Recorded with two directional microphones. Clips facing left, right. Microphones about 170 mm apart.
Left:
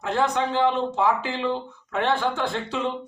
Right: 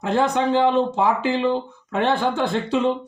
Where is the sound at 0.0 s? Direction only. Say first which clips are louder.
Right 4 dB; 15° right (ahead or behind).